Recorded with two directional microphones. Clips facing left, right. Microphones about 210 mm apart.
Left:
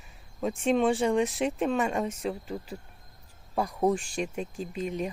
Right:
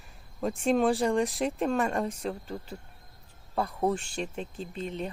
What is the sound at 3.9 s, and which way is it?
Speech, 10° left (ahead or behind).